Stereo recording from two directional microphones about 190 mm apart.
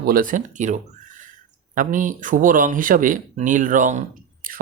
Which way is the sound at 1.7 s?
45° right (ahead or behind).